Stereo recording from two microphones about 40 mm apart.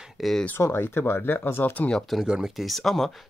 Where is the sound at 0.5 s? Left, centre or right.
Left.